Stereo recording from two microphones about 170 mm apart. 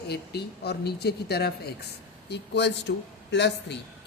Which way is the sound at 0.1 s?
75° left (ahead or behind).